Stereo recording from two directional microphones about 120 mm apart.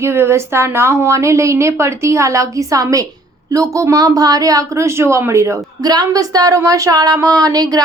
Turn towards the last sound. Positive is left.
turn(degrees=-30)  # may be behind; listen again after turning